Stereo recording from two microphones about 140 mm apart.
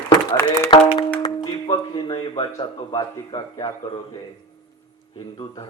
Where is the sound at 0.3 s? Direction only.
20° left (ahead or behind).